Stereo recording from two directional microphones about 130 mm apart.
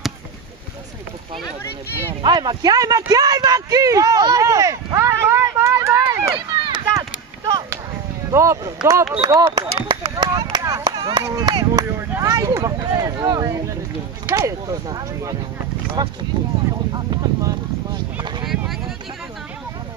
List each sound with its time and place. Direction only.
2.2 s speech: 30° right (ahead or behind)
6.3 s run: 40° right (ahead or behind)
6.9 s a sound: 25° right (ahead or behind)
8.3 s speech: 25° right (ahead or behind)
9.8 s a sound: 40° right (ahead or behind)
12.2 s speech: 30° right (ahead or behind)